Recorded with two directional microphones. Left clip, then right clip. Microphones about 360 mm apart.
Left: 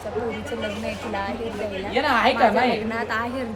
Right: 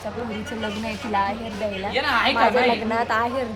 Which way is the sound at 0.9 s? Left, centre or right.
Centre.